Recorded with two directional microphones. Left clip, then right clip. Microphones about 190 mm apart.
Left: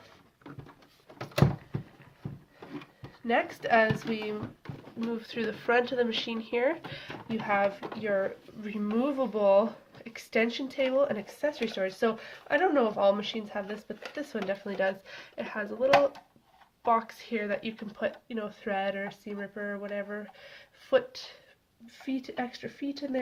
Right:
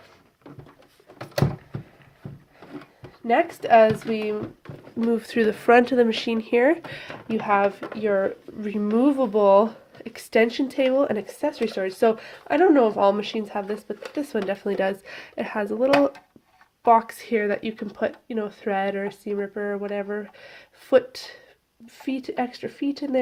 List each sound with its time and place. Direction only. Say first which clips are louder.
3.2 s speech: right 8 dB; 50° right (ahead or behind)